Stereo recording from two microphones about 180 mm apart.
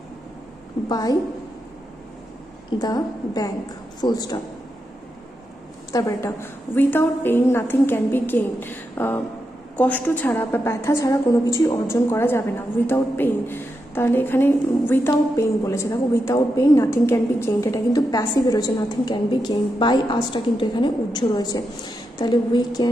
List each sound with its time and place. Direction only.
0.8 s a woman's voice: 20° left (ahead or behind)
2.8 s a woman's voice: 20° left (ahead or behind)
5.9 s a woman's voice: 20° left (ahead or behind)